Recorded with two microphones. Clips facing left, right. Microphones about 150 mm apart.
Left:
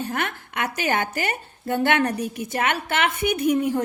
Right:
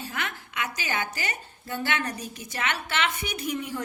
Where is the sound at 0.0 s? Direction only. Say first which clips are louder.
Left 7 dB; 55° left (ahead or behind).